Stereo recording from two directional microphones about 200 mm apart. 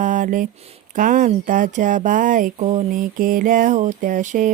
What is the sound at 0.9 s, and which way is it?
Speech, 40° right (ahead or behind).